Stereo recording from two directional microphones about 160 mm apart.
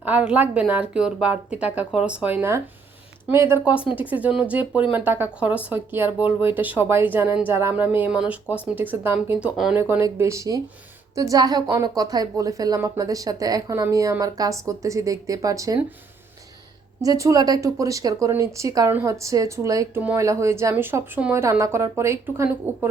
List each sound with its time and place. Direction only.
0.0 s a woman's voice: 10° right (ahead or behind)
17.0 s a woman's voice: 20° right (ahead or behind)